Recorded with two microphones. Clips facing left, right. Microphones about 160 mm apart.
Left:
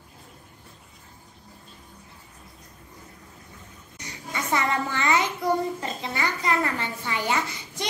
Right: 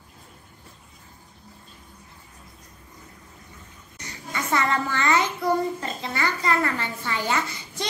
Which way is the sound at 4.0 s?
15° left (ahead or behind).